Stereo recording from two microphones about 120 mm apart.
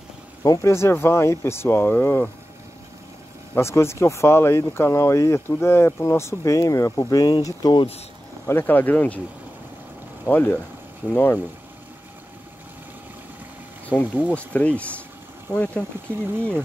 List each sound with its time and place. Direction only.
0.4 s speech: 25° left (ahead or behind)
3.5 s speech: 20° left (ahead or behind); by 7.8 s 35° left (ahead or behind)
8.5 s speech: 15° left (ahead or behind)
10.2 s speech: 15° left (ahead or behind)
13.8 s speech: 10° left (ahead or behind)